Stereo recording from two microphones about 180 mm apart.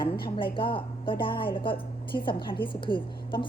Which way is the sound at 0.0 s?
30° left (ahead or behind).